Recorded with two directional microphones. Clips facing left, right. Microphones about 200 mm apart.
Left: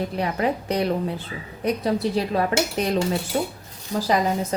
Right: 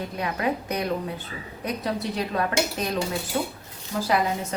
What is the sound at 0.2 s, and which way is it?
A woman's voice, 30° left (ahead or behind).